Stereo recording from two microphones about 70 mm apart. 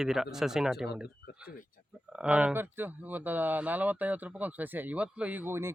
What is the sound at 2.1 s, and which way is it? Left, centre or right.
Speech, centre.